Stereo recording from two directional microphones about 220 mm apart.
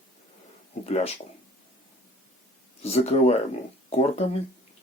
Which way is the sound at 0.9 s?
30° left (ahead or behind).